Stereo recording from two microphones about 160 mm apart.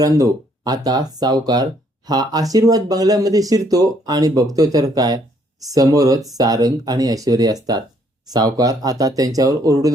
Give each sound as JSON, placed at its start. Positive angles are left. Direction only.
{"t": 0.0, "sound": "speech", "side_deg": -20}